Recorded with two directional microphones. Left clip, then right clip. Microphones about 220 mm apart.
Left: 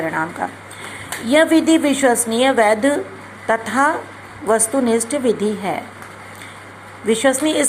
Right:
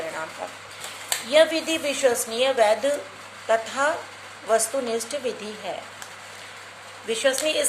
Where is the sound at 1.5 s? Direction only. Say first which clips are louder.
Left 11 dB; 50° left (ahead or behind).